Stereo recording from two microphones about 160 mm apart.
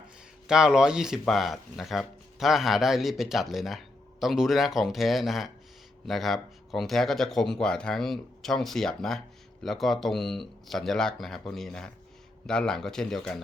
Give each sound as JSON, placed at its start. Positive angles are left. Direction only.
{"t": 0.4, "sound": "speech", "side_deg": -5}